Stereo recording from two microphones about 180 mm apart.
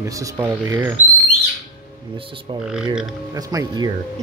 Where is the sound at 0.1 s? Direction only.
15° right (ahead or behind).